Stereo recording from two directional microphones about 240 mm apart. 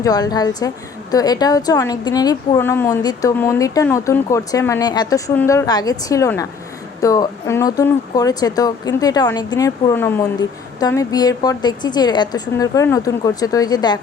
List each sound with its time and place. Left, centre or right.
0.0 s a woman's voice: centre